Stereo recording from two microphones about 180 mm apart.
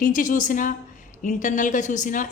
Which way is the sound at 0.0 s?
50° left (ahead or behind).